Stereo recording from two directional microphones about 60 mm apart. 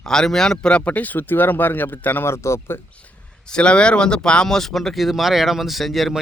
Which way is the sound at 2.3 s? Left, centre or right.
Left.